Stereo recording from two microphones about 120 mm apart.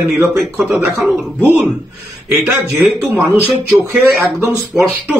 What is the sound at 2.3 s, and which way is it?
Speech, 15° right (ahead or behind).